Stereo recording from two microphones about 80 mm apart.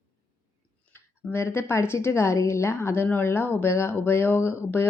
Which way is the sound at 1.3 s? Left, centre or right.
Left.